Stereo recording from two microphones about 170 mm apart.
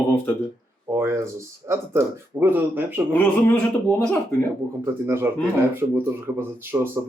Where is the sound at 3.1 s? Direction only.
10° left (ahead or behind).